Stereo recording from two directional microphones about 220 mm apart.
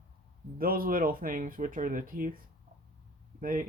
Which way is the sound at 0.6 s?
40° right (ahead or behind).